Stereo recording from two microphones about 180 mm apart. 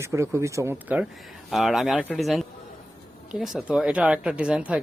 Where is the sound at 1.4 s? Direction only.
Centre (ahead or behind).